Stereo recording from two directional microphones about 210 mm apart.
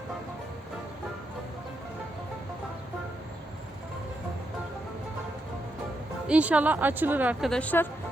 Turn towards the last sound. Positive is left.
turn(degrees=5)  # may be behind; listen again after turning